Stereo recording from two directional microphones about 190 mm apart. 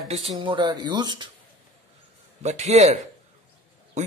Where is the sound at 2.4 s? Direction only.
35° right (ahead or behind).